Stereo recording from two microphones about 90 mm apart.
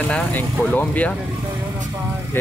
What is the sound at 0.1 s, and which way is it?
Speech, 15° left (ahead or behind).